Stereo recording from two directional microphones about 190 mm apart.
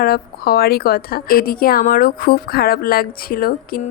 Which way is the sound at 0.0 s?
55° left (ahead or behind).